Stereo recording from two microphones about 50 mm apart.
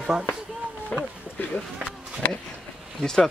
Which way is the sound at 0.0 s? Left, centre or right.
Centre.